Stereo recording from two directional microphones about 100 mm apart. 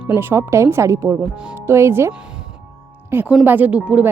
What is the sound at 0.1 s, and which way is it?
A woman's voice, 20° right (ahead or behind).